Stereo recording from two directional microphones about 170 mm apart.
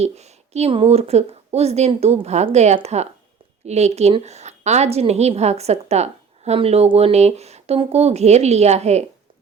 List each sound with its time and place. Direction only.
0.0 s a woman's voice: 40° right (ahead or behind)